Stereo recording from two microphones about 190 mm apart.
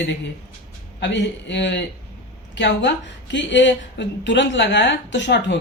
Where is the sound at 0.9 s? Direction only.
70° left (ahead or behind).